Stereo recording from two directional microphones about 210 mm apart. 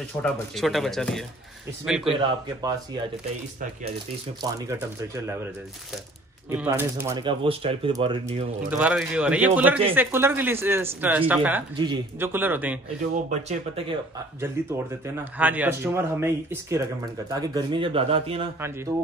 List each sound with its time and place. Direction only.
0.2 s a man's voice: centre (ahead or behind)
4.4 s a man's voice: 15° right (ahead or behind)
6.5 s speech: 10° right (ahead or behind); by 8.5 s 25° right (ahead or behind)
8.6 s a man's voice: 5° right (ahead or behind)
11.7 s speech: 20° right (ahead or behind)
12.2 s a man's voice: 10° right (ahead or behind)
13.1 s speech: 35° right (ahead or behind)
14.4 s a man's voice: 10° right (ahead or behind); by 18.5 s 25° right (ahead or behind)